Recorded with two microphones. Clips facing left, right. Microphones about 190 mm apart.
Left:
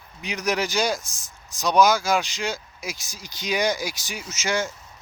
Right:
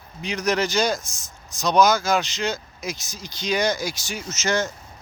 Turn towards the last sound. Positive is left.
turn(degrees=10)  # may be behind; listen again after turning